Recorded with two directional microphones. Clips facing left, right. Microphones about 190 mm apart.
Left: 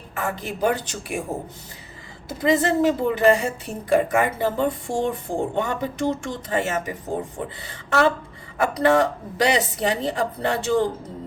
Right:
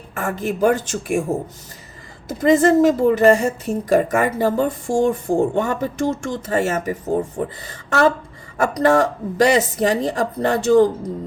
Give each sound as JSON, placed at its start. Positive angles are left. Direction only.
{"t": 0.1, "sound": "a woman's voice", "side_deg": -50}
{"t": 2.2, "sound": "a woman's voice", "side_deg": -45}